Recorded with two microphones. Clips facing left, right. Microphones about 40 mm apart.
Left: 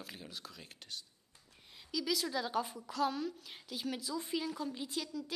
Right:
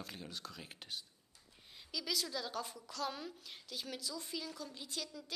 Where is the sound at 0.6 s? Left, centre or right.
Centre.